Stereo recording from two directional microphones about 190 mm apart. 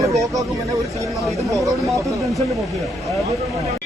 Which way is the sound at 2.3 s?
Centre (ahead or behind).